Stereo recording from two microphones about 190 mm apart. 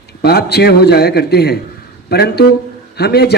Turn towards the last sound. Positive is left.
turn(degrees=55)  # may be behind; listen again after turning